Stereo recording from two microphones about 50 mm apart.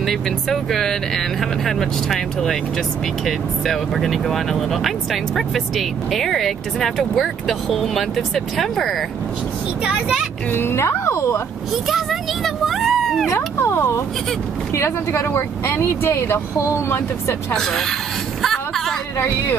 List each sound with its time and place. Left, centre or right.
0.0 s speech: centre
10.5 s speech: left
11.9 s vehicle: centre
13.3 s speech: left
15.3 s speech: left
17.6 s speech: centre
18.4 s a sound: centre
19.1 s speech: left